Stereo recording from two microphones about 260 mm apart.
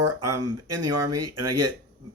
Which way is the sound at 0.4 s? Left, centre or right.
Right.